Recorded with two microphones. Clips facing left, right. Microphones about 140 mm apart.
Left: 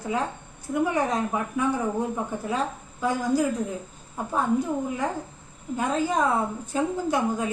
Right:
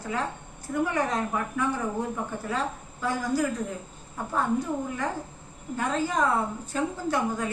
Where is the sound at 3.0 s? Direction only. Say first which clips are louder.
Left 3 dB; 15° left (ahead or behind).